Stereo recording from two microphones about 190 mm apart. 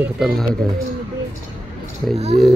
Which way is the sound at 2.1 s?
35° right (ahead or behind).